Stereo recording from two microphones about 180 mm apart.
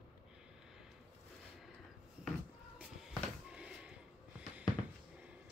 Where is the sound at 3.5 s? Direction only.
5° right (ahead or behind).